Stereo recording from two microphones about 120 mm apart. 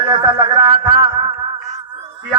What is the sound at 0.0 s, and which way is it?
Music, 45° right (ahead or behind).